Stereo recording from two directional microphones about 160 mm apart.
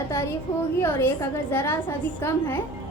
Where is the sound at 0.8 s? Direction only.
15° left (ahead or behind).